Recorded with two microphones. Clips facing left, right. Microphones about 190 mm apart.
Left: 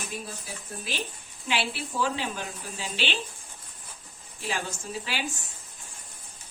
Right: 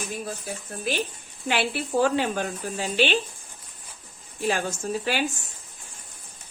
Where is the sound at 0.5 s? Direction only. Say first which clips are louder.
Right 9 dB; 55° right (ahead or behind).